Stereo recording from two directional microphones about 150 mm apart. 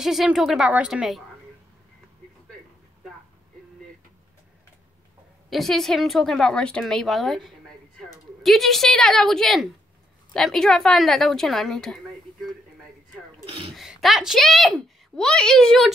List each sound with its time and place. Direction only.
0.0 s a woman's voice: centre (ahead or behind)
5.5 s a woman's voice: centre (ahead or behind)
13.5 s a sound: 40° right (ahead or behind)
13.7 s a woman's voice: centre (ahead or behind)